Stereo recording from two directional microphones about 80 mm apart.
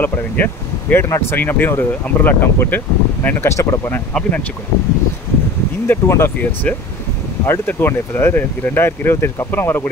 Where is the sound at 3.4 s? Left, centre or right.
Left.